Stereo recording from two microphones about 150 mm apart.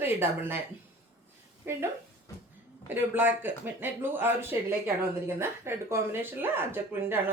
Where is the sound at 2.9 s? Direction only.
10° right (ahead or behind).